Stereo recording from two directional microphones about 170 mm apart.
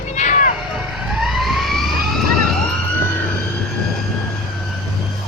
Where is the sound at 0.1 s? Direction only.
45° left (ahead or behind).